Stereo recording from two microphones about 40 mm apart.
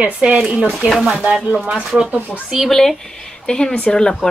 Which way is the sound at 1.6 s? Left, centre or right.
Right.